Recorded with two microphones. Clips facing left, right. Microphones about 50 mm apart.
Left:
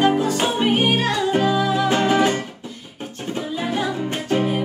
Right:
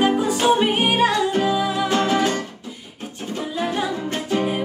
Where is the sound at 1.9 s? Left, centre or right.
Left.